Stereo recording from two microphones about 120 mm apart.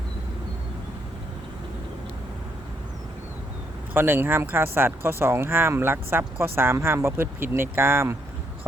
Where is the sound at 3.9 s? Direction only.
20° right (ahead or behind).